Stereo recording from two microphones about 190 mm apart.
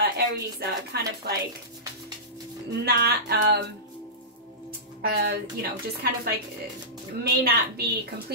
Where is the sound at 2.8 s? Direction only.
60° right (ahead or behind).